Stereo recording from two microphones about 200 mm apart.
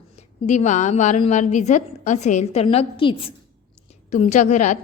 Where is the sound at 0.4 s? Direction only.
35° left (ahead or behind).